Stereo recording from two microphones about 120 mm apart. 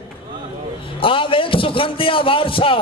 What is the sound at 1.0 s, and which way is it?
A man's voice, 45° left (ahead or behind).